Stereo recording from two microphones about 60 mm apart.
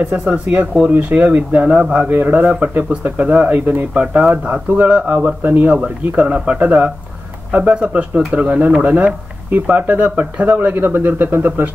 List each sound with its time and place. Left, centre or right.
0.8 s speech: right
5.4 s a man's voice: right